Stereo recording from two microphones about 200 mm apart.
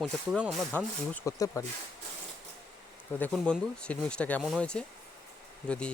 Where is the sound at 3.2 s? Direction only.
5° left (ahead or behind).